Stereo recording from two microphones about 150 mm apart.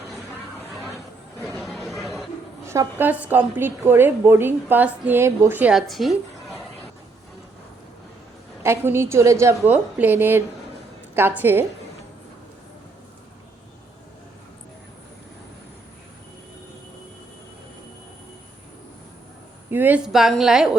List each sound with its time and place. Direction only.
0.7 s chatter: centre (ahead or behind)
2.6 s a woman's voice: 15° right (ahead or behind); by 6.6 s centre (ahead or behind)
8.6 s a woman's voice: 15° right (ahead or behind)
19.7 s speech: 10° right (ahead or behind)